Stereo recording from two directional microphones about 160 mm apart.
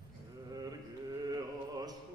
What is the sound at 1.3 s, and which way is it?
Music, 25° right (ahead or behind).